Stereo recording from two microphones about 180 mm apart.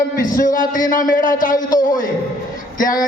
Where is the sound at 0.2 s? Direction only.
45° left (ahead or behind).